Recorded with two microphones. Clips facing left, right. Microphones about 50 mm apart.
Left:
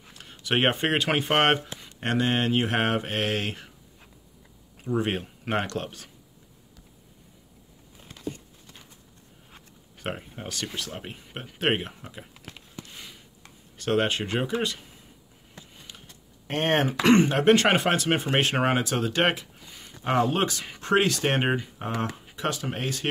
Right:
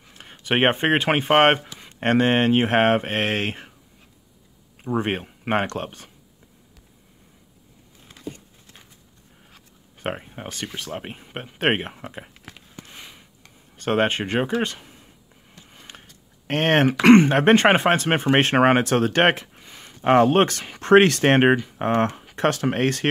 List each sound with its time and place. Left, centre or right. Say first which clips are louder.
0.1 s speech: right 3 dB; right
4.8 s speech: right 3 dB; right
9.9 s speech: right 4 dB; right
12.8 s a sound: right 2 dB; right
13.7 s speech: right 3 dB; right
16.4 s speech: right 5 dB; right
17.1 s speech: right 5 dB; right
17.6 s speech: right 5 dB; right